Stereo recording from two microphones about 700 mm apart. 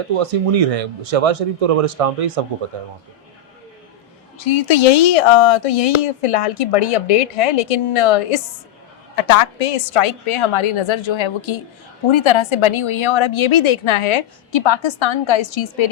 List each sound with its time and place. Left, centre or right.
0.1 s speech: right
4.4 s a woman's voice: left